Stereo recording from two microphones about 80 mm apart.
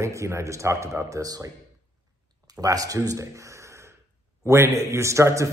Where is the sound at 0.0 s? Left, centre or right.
Right.